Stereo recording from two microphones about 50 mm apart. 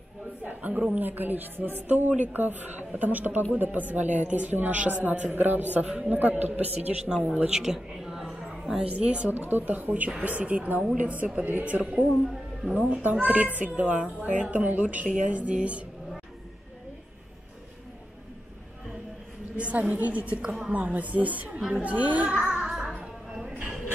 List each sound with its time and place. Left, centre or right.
0.4 s speech: right
7.1 s speech: centre
7.4 s a sound: centre
8.9 s a woman's voice: right
9.3 s a woman's voice: right
19.5 s a woman's voice: right
21.6 s a woman's voice: right
21.9 s speech: right
22.4 s music: centre